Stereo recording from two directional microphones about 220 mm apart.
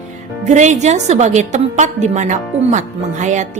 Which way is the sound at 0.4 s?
30° right (ahead or behind).